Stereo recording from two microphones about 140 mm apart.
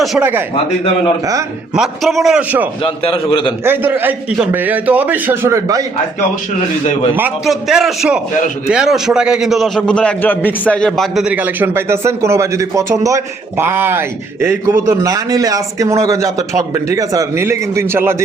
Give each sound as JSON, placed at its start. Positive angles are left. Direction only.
{"t": 0.2, "sound": "a man's voice", "side_deg": -15}
{"t": 1.7, "sound": "a man's voice", "side_deg": 0}
{"t": 2.8, "sound": "a man's voice", "side_deg": 40}
{"t": 3.6, "sound": "a man's voice", "side_deg": -15}
{"t": 7.4, "sound": "a man's voice", "side_deg": 0}